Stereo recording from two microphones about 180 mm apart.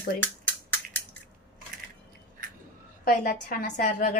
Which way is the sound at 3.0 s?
50° left (ahead or behind).